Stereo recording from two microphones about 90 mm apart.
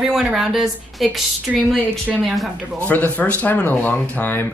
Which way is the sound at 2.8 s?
20° left (ahead or behind).